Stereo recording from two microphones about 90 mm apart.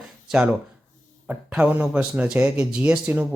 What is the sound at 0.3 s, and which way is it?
Speech, 10° right (ahead or behind).